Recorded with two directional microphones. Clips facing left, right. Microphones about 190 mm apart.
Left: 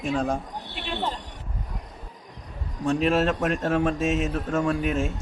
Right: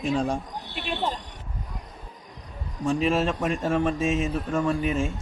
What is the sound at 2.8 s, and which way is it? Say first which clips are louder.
A man's voice: left 1 dB; centre (ahead or behind).